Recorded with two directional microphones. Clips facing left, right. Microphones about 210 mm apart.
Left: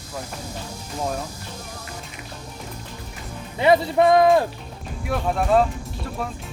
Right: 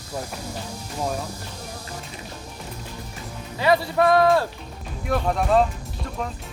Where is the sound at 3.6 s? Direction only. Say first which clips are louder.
Left 3 dB; 20° left (ahead or behind).